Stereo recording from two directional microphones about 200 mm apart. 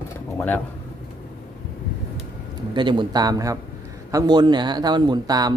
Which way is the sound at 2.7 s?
25° right (ahead or behind).